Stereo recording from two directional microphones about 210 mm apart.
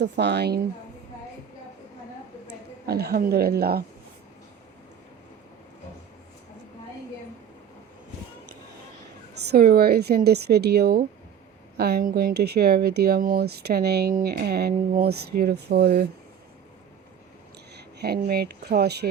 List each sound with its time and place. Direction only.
0.0 s speech: 55° right (ahead or behind)
2.8 s speech: 50° right (ahead or behind)
9.5 s speech: 50° right (ahead or behind)
17.7 s speech: 50° right (ahead or behind)